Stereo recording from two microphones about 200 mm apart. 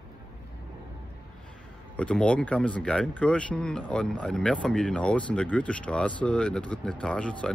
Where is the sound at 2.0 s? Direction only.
5° left (ahead or behind).